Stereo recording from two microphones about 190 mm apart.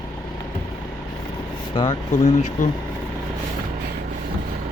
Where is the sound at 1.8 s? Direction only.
30° left (ahead or behind).